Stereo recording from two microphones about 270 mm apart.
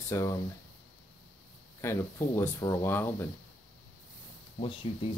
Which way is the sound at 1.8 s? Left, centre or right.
Centre.